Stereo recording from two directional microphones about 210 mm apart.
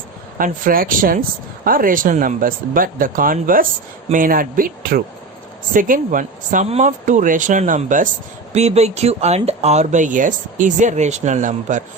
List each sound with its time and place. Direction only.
0.3 s speech: 40° right (ahead or behind)